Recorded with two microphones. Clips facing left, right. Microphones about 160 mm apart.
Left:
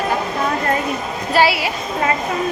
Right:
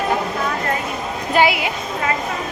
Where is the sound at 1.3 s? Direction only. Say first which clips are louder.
Left 1 dB; 20° right (ahead or behind).